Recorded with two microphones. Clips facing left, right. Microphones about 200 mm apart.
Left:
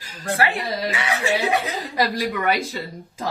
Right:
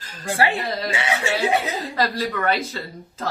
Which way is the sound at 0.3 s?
30° right (ahead or behind).